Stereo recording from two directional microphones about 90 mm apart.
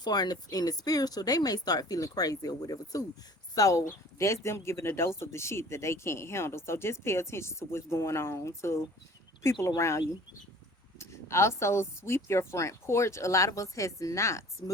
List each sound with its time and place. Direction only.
0.0 s speech: 50° left (ahead or behind); by 14.4 s 35° left (ahead or behind)